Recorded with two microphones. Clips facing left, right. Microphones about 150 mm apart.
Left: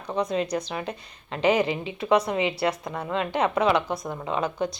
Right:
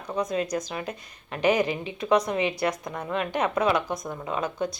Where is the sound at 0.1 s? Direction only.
30° left (ahead or behind).